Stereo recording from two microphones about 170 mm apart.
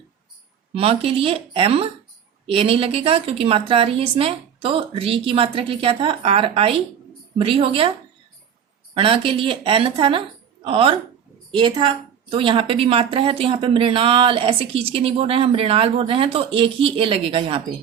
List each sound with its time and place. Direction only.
0.7 s speech: 35° right (ahead or behind)
9.0 s a woman's voice: 30° right (ahead or behind)